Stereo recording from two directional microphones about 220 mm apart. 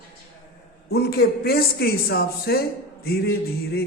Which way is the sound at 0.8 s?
45° left (ahead or behind).